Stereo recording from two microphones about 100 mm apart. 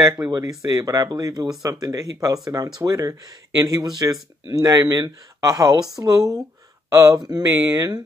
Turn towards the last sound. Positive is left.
turn(degrees=-35)  # may be behind; listen again after turning